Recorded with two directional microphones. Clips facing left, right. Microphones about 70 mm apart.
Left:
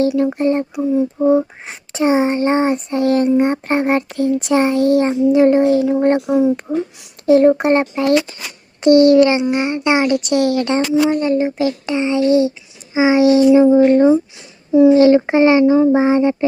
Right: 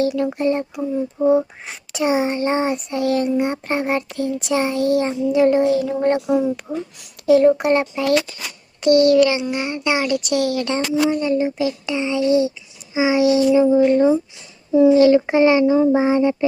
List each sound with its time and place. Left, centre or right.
0.0 s a child's voice: left
1.2 s a child's voice: centre
1.6 s a child's voice: left
6.2 s a child's voice: left
10.4 s a child's voice: left